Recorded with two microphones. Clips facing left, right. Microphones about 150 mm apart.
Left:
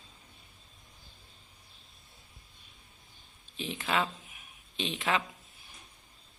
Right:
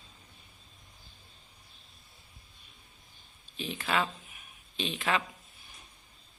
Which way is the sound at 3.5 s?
20° left (ahead or behind).